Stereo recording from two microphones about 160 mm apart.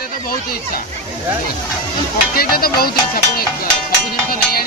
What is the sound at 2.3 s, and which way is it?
Speech, 70° left (ahead or behind).